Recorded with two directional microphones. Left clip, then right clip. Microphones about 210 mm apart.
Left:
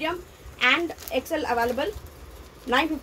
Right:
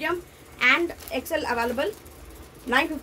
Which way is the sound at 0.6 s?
15° right (ahead or behind).